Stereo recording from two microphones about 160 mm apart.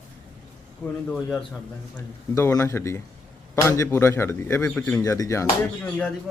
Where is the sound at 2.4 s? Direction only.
20° left (ahead or behind).